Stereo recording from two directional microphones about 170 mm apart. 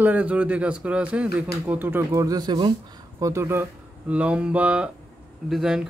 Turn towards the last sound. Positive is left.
turn(degrees=-5)  # may be behind; listen again after turning